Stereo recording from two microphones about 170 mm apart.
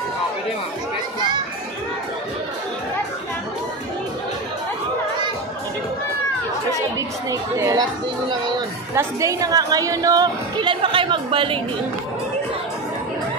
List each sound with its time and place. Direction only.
7.2 s speech: 20° right (ahead or behind)
8.3 s a sound: 25° right (ahead or behind)
8.9 s a woman's voice: 20° right (ahead or behind)